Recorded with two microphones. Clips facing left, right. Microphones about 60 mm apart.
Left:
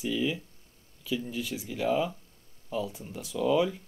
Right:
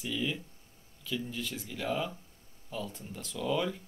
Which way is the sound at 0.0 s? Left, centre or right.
Centre.